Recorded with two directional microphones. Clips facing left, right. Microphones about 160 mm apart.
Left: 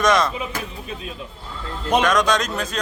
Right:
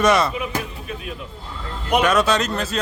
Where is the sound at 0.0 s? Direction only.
10° right (ahead or behind).